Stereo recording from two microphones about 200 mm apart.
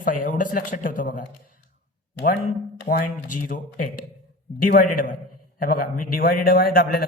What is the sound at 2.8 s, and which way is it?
A man's voice, 40° left (ahead or behind).